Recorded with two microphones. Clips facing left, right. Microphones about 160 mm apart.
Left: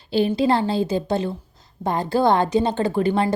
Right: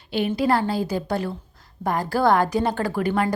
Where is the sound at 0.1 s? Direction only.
30° left (ahead or behind).